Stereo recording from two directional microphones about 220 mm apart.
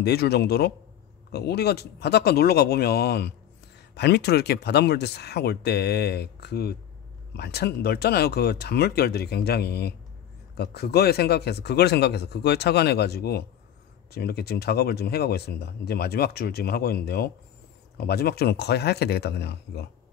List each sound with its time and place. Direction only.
0.0 s speech: 45° left (ahead or behind)